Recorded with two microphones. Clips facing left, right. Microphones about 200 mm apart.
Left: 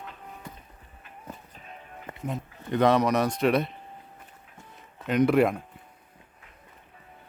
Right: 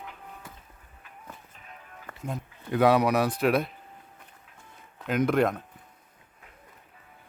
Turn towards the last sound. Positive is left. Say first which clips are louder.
# left 3 dB
turn(degrees=5)  # may be behind; listen again after turning